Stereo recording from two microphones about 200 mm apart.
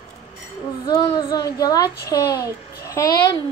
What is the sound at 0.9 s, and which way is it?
A woman's voice, 20° left (ahead or behind).